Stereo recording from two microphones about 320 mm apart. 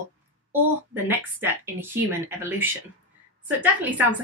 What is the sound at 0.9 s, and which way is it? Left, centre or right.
A woman's voice, centre.